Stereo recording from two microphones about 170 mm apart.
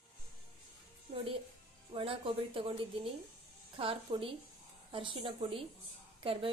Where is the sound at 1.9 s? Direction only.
30° right (ahead or behind).